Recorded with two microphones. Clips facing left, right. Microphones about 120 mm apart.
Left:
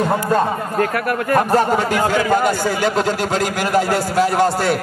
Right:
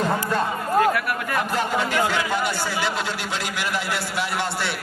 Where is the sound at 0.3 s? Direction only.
45° left (ahead or behind).